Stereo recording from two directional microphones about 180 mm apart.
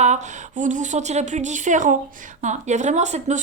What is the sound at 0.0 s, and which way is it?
A woman's voice, 40° right (ahead or behind).